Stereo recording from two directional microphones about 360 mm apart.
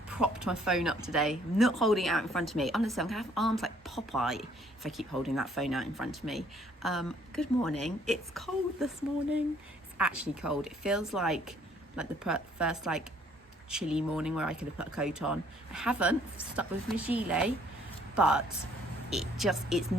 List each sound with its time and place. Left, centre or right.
0.1 s speech: centre
10.1 s speech: right
10.5 s a man's voice: centre